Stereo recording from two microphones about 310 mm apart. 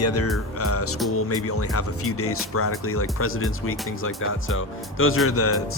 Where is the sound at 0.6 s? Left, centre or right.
Left.